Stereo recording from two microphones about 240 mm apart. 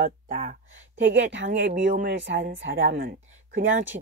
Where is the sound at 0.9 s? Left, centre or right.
Right.